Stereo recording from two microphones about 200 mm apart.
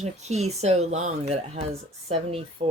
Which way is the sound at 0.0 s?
35° right (ahead or behind).